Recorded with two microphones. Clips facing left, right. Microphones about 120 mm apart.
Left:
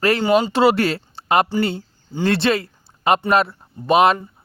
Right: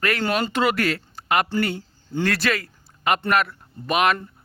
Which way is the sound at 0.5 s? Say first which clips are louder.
Left 6 dB; 30° left (ahead or behind).